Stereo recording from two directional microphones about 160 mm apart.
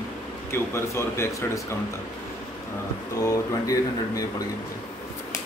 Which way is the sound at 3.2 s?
20° left (ahead or behind).